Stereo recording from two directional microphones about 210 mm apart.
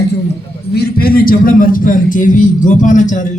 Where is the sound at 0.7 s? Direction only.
45° left (ahead or behind).